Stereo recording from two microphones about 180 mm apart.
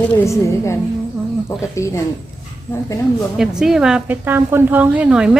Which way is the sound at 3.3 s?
5° right (ahead or behind).